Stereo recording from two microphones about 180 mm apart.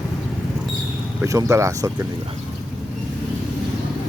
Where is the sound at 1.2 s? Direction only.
20° right (ahead or behind).